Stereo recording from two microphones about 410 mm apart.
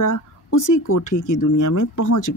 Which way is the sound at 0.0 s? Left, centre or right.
Left.